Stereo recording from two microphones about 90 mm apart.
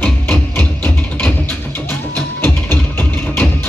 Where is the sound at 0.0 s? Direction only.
20° left (ahead or behind).